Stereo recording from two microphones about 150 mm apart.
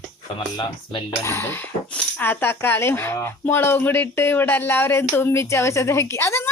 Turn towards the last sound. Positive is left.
turn(degrees=15)  # may be behind; listen again after turning